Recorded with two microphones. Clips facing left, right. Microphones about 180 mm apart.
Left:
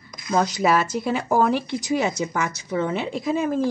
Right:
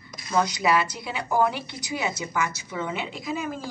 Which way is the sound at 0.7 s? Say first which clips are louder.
Left 4 dB; 45° left (ahead or behind).